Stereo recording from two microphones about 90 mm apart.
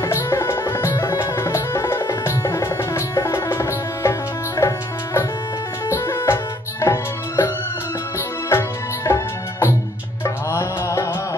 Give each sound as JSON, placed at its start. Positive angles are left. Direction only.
{"t": 0.0, "sound": "music", "side_deg": 30}
{"t": 8.5, "sound": "music", "side_deg": 30}